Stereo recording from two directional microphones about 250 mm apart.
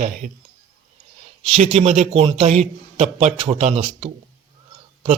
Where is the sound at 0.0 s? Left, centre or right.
Right.